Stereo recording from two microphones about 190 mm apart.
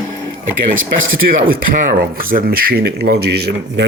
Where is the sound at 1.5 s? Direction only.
45° right (ahead or behind).